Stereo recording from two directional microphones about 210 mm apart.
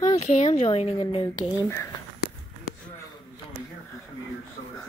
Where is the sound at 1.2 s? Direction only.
10° left (ahead or behind).